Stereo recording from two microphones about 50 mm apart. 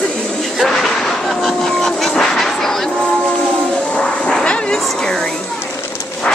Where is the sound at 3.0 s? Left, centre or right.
Left.